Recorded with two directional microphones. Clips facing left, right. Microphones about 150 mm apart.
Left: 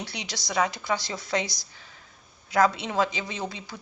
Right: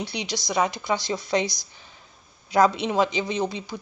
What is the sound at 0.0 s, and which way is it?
Speech, 20° right (ahead or behind).